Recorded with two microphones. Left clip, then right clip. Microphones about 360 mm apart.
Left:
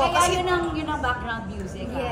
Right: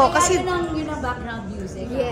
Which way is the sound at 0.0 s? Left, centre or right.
Right.